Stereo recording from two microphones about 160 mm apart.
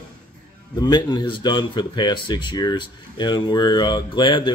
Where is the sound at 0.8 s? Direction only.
25° left (ahead or behind).